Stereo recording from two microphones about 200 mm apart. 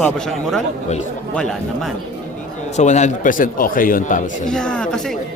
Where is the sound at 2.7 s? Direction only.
35° left (ahead or behind).